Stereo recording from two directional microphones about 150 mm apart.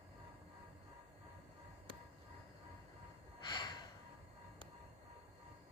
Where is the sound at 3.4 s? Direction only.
30° left (ahead or behind).